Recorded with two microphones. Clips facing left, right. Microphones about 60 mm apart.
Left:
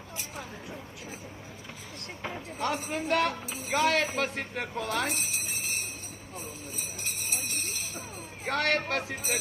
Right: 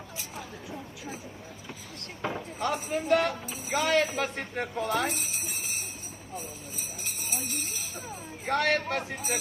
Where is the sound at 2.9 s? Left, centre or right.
Left.